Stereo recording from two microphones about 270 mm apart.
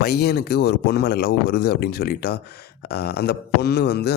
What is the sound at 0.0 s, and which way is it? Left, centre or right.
A man's voice, left.